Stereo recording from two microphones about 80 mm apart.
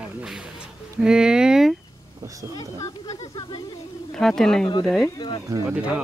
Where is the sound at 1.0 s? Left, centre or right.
Centre.